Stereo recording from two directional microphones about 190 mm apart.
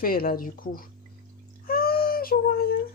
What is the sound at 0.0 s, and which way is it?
Speech, 50° left (ahead or behind).